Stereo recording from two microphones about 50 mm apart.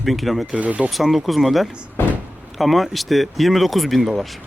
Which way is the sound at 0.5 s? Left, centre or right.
Right.